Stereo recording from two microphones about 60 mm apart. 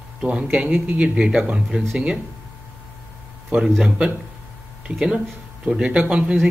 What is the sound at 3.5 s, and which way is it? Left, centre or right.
Speech, right.